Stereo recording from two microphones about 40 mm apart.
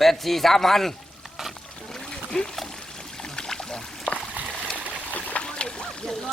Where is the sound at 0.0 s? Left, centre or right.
Centre.